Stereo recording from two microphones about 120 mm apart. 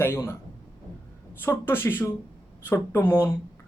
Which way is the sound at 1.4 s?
20° left (ahead or behind).